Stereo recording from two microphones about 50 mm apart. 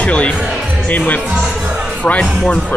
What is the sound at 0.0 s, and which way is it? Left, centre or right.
Speech, left.